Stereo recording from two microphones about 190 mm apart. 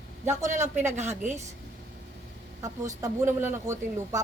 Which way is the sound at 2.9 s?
15° right (ahead or behind).